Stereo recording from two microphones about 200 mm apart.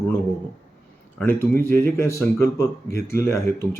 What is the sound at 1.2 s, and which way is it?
Speech, 10° left (ahead or behind).